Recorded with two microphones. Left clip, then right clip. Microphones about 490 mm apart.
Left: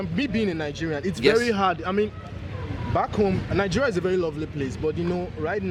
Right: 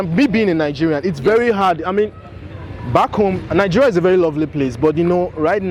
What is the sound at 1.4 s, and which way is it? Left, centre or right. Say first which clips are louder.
Speech: right 8 dB; centre.